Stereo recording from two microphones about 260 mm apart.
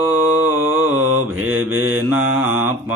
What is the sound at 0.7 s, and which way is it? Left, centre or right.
Mantra, right.